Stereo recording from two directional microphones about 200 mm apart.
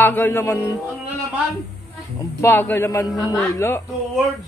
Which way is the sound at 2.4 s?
10° left (ahead or behind).